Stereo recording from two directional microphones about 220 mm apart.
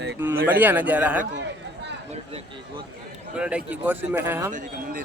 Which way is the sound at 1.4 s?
50° right (ahead or behind).